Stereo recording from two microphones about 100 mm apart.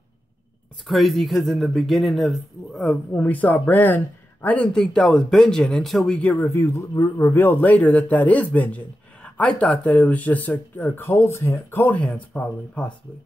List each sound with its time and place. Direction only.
0.8 s speech: centre (ahead or behind)
3.2 s a man's voice: 15° left (ahead or behind)
6.5 s a man's voice: 30° left (ahead or behind); by 12.9 s 10° left (ahead or behind)